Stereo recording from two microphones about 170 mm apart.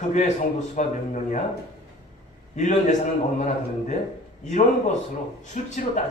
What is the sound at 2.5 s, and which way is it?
A man's voice, 45° left (ahead or behind).